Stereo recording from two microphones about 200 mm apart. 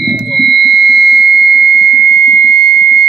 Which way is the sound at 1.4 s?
55° right (ahead or behind).